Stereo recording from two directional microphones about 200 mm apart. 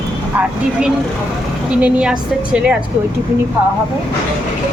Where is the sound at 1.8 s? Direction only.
5° right (ahead or behind).